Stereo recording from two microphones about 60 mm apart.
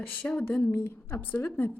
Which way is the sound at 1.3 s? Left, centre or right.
Left.